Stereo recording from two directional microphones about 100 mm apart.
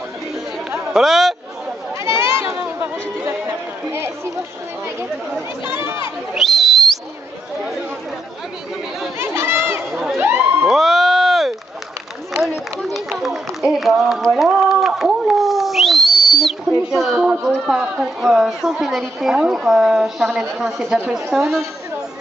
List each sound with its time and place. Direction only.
0.9 s a woman's voice: centre (ahead or behind)
2.0 s sheep: 25° right (ahead or behind)
2.6 s chatter: 20° right (ahead or behind)
5.7 s speech: 25° right (ahead or behind)
6.3 s whistling: centre (ahead or behind)
9.2 s chatter: 25° right (ahead or behind)
10.1 s a sound: 25° right (ahead or behind)
10.7 s sheep: centre (ahead or behind)
13.2 s a sound: centre (ahead or behind)
17.2 s a woman's voice: 10° right (ahead or behind)
21.3 s a woman's voice: 5° right (ahead or behind)